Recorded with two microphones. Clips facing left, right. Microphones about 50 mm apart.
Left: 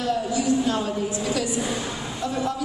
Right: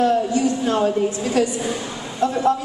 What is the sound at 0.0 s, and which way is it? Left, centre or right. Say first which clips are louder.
A woman's voice: right 6 dB; right.